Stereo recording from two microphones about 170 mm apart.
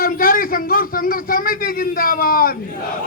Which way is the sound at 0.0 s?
60° left (ahead or behind).